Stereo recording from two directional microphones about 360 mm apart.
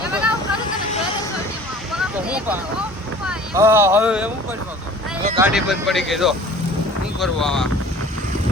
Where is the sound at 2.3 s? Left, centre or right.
Centre.